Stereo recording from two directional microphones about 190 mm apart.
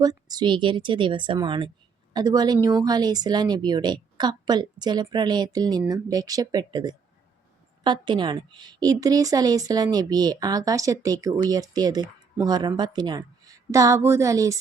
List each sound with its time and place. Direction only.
0.0 s a woman's voice: 20° right (ahead or behind)